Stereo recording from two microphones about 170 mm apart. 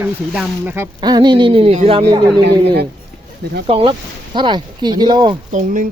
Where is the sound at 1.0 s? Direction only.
25° right (ahead or behind).